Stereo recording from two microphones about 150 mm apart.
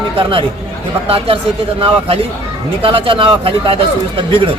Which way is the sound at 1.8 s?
40° right (ahead or behind).